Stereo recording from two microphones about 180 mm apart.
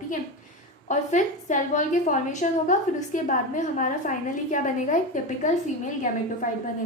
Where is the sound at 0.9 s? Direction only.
45° left (ahead or behind).